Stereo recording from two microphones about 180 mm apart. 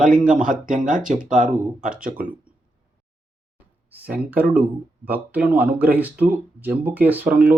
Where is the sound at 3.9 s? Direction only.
10° right (ahead or behind).